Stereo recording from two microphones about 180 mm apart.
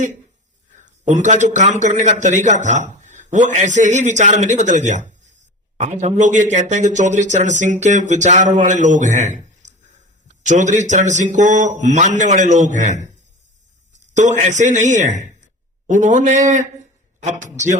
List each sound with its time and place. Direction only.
1.0 s speech: 45° right (ahead or behind)
14.1 s a man's voice: 40° right (ahead or behind)